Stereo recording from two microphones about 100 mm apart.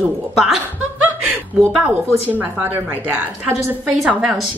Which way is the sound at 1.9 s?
20° right (ahead or behind).